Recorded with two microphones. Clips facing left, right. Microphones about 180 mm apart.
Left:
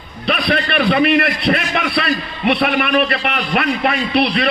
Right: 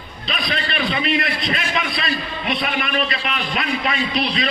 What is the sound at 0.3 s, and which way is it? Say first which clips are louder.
A man's voice: left 8 dB; 60° left (ahead or behind).